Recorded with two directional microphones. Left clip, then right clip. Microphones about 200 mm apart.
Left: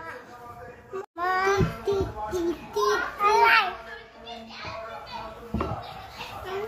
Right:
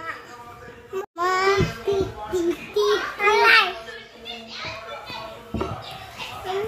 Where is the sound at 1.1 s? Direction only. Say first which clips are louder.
Right 4 dB; 35° right (ahead or behind).